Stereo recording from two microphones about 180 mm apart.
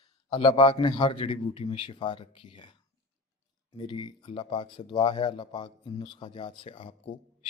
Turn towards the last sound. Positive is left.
turn(degrees=30)  # may be behind; listen again after turning